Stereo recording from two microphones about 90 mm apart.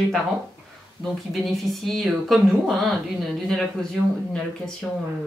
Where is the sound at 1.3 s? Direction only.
Centre (ahead or behind).